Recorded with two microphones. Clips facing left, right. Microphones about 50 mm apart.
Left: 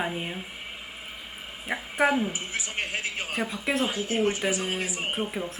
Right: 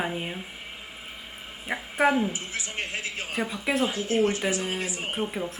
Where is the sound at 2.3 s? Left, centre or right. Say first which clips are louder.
Left 1 dB; left.